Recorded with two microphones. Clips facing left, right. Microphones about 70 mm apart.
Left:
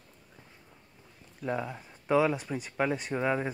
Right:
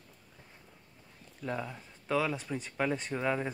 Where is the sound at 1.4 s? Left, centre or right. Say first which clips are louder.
Left 4 dB; centre.